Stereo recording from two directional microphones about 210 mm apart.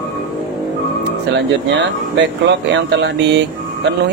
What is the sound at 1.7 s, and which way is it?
Speech, 55° right (ahead or behind).